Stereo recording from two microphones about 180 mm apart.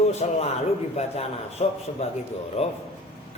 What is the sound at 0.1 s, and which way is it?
A man's voice, 35° left (ahead or behind).